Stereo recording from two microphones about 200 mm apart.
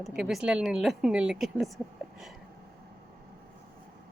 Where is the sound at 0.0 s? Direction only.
Centre (ahead or behind).